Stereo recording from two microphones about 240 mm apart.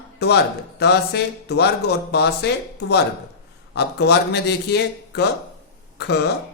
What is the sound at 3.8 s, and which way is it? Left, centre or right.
Speech, left.